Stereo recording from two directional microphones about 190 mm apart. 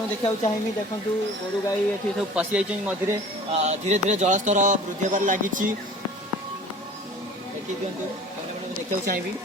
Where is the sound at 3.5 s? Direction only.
35° right (ahead or behind).